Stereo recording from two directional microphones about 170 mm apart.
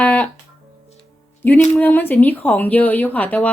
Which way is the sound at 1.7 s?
10° left (ahead or behind).